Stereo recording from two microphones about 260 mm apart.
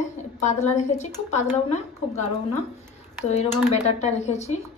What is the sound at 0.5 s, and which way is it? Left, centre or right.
Speech, left.